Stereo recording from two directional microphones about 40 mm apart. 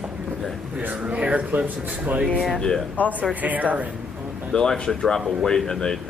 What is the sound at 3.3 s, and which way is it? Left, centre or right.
Speech, right.